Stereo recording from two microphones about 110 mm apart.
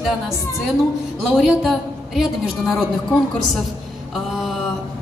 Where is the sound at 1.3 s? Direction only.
Centre (ahead or behind).